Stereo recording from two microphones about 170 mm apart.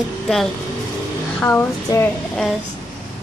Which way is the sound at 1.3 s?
10° left (ahead or behind).